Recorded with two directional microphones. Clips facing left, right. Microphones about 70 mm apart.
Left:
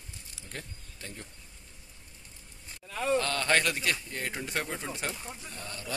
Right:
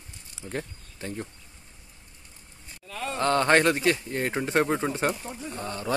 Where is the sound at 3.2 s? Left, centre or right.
Right.